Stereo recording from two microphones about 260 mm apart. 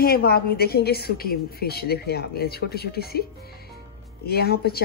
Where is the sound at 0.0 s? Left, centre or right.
Left.